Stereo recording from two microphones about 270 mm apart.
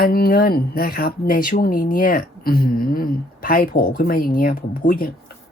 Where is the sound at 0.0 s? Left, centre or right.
Left.